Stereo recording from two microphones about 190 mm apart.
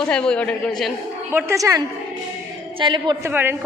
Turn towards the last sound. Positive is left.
turn(degrees=-10)  # may be behind; listen again after turning